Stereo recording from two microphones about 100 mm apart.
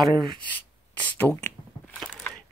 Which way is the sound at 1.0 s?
20° left (ahead or behind).